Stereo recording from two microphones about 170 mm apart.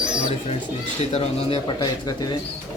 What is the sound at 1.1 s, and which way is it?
Speech, 35° left (ahead or behind).